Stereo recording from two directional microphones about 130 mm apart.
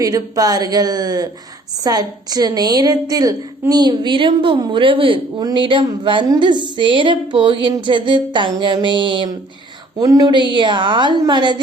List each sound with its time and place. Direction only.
0.0 s a woman's voice: 30° right (ahead or behind)